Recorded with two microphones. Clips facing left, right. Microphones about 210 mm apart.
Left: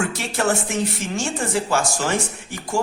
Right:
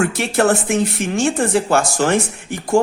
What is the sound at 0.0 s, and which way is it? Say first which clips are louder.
Speech: right 6 dB; 55° right (ahead or behind).